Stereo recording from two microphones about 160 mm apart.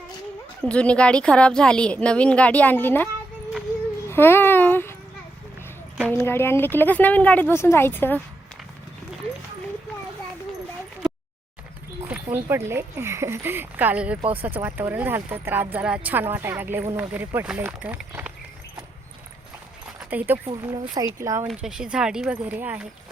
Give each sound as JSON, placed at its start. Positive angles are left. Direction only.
{"t": 0.6, "sound": "a woman's voice", "side_deg": 5}
{"t": 4.1, "sound": "a sound", "side_deg": 15}
{"t": 6.1, "sound": "a woman's voice", "side_deg": 15}
{"t": 12.5, "sound": "speech", "side_deg": -15}
{"t": 20.1, "sound": "speech", "side_deg": -10}
{"t": 20.6, "sound": "speech", "side_deg": -25}
{"t": 21.4, "sound": "speech", "side_deg": -5}